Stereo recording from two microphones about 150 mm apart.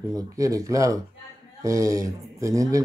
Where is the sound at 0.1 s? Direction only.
20° right (ahead or behind).